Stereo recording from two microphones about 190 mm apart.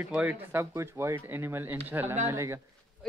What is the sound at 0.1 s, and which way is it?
Speech, 10° right (ahead or behind).